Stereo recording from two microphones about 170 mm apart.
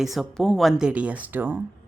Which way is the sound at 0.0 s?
Centre (ahead or behind).